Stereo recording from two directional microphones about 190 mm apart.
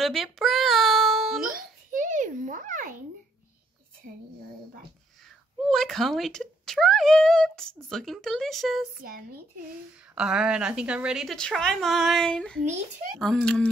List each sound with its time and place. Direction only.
0.0 s a sound: centre (ahead or behind)
1.9 s a sound: 40° right (ahead or behind)
5.6 s speech: centre (ahead or behind)
9.0 s speech: 50° right (ahead or behind)
10.1 s a woman's voice: 5° right (ahead or behind)
12.6 s a child's voice: 40° right (ahead or behind)
13.2 s a woman's voice: 5° left (ahead or behind)